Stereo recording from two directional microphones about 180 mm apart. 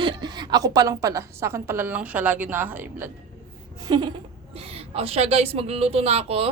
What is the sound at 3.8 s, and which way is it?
A woman's voice, 25° right (ahead or behind).